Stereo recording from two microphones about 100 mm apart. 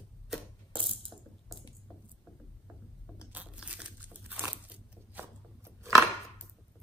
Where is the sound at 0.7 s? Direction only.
60° right (ahead or behind).